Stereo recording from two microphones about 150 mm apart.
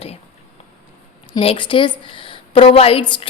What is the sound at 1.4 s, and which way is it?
A woman's voice, 35° left (ahead or behind).